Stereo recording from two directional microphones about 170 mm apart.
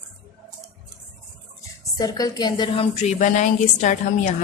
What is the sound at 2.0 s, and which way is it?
A woman's voice, 20° left (ahead or behind).